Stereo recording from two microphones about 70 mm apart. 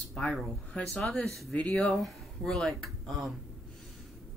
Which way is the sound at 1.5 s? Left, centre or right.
Centre.